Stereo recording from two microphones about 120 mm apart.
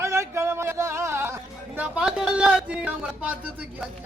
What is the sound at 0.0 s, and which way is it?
Music, 25° right (ahead or behind).